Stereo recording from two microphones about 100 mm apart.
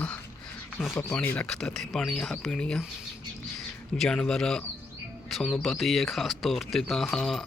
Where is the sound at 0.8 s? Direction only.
5° right (ahead or behind).